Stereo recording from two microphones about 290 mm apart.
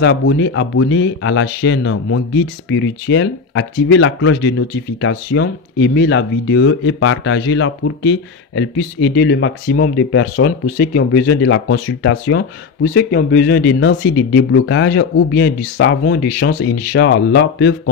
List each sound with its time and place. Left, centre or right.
0.0 s speech: left